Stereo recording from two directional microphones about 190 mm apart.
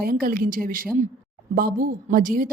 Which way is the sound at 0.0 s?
50° right (ahead or behind).